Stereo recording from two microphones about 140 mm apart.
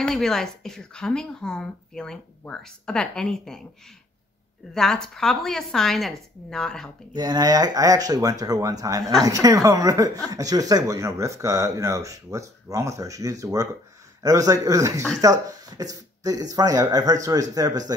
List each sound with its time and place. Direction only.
0.0 s speech: 5° left (ahead or behind)
4.7 s speech: 5° left (ahead or behind)
7.2 s speech: 30° right (ahead or behind)